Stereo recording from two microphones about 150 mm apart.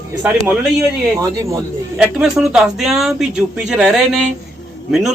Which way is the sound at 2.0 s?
5° right (ahead or behind).